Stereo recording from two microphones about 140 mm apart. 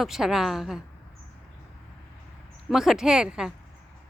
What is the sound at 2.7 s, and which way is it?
Speech, 5° right (ahead or behind).